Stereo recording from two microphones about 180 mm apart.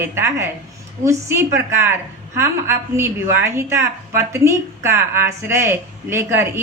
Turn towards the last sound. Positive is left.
turn(degrees=-15)  # may be behind; listen again after turning